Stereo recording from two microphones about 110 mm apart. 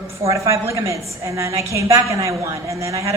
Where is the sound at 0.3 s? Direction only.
30° right (ahead or behind).